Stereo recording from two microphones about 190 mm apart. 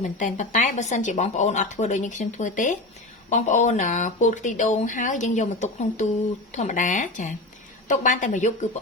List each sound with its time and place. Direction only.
0.0 s speech: 40° left (ahead or behind)